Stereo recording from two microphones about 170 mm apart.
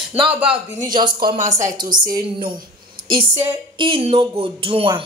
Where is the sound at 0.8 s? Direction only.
25° right (ahead or behind).